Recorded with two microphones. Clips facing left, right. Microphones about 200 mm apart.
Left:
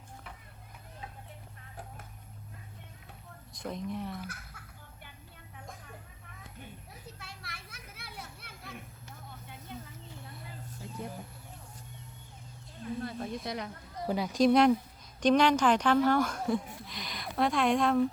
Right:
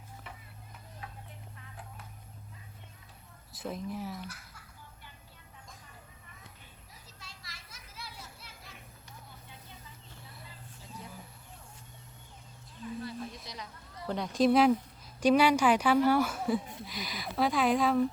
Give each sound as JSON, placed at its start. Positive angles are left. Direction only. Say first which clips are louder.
{"t": 3.5, "sound": "speech", "louder": "left 1 dB", "side_deg": -5}
{"t": 6.9, "sound": "children playing", "louder": "left 6 dB", "side_deg": 60}
{"t": 9.5, "sound": "vehicle", "louder": "left 7 dB", "side_deg": 60}
{"t": 12.8, "sound": "wild animals", "louder": "left 2 dB", "side_deg": 50}
{"t": 13.4, "sound": "a sound", "louder": "left 9 dB", "side_deg": 60}
{"t": 14.1, "sound": "a woman's voice", "louder": "left 1 dB", "side_deg": 5}